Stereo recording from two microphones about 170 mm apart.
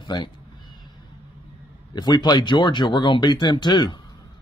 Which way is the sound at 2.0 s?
25° left (ahead or behind).